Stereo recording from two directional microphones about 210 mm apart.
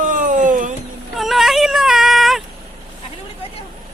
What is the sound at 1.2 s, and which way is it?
Yodeling, centre (ahead or behind).